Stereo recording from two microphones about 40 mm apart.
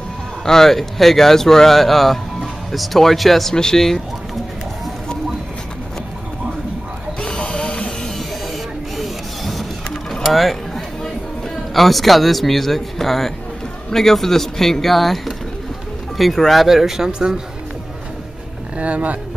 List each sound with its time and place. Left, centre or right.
0.5 s speech: centre
3.5 s speech: centre
7.2 s a sound: left
8.9 s mechanisms: centre
10.2 s speech: centre
16.6 s speech: centre
18.8 s speech: right